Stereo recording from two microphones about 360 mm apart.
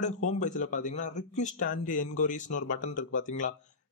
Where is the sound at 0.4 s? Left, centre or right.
Left.